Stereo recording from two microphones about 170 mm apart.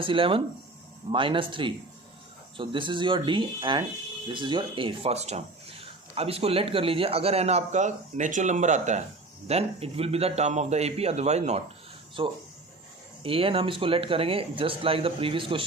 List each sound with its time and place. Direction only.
0.0 s speech: 30° right (ahead or behind)